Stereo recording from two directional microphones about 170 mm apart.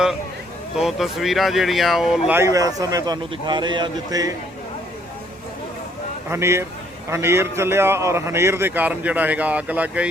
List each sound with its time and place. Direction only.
0.8 s speech: centre (ahead or behind)
2.3 s a man's voice: 15° right (ahead or behind)
6.3 s a man's voice: 15° right (ahead or behind)